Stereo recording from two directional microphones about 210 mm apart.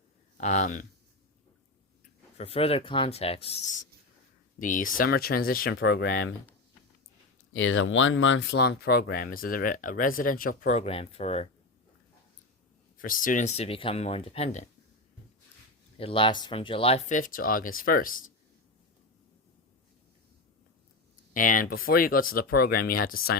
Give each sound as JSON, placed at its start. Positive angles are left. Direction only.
{"t": 0.3, "sound": "speech", "side_deg": 35}
{"t": 2.4, "sound": "speech", "side_deg": 30}
{"t": 4.6, "sound": "speech", "side_deg": 40}
{"t": 5.7, "sound": "speech", "side_deg": 55}
{"t": 7.5, "sound": "speech", "side_deg": 70}
{"t": 13.0, "sound": "speech", "side_deg": 40}
{"t": 16.0, "sound": "speech", "side_deg": 25}
{"t": 21.3, "sound": "speech", "side_deg": 40}